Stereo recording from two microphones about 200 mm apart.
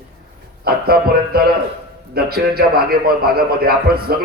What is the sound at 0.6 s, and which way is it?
A man's voice, 50° right (ahead or behind).